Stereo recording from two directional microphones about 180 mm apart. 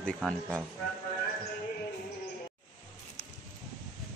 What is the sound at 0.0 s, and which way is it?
Speech, 5° left (ahead or behind).